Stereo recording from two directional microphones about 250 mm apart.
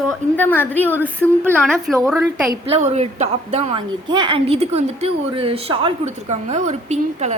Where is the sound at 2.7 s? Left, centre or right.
Right.